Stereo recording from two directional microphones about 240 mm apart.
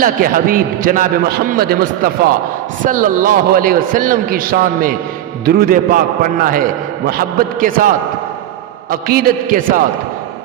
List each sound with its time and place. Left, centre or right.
0.0 s a man's voice: right